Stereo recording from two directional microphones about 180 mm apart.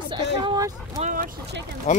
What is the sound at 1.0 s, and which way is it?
Speech, 45° right (ahead or behind).